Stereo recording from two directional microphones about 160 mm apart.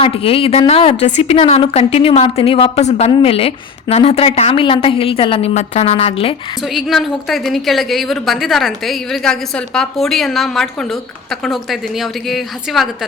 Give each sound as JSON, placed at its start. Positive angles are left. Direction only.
{"t": 0.0, "sound": "a woman's voice", "side_deg": 35}
{"t": 6.6, "sound": "a woman's voice", "side_deg": 0}